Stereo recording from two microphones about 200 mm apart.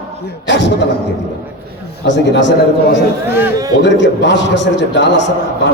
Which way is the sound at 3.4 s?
15° right (ahead or behind).